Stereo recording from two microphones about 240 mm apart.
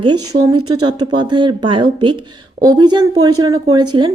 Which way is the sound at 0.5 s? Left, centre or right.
Right.